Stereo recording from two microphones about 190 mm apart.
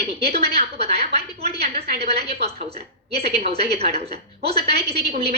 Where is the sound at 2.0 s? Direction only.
60° right (ahead or behind).